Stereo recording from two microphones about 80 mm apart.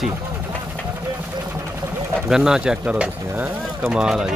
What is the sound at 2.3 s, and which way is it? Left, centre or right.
Speech, centre.